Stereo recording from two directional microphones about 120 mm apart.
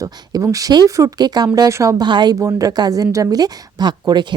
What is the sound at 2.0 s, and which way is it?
Speech, 40° right (ahead or behind).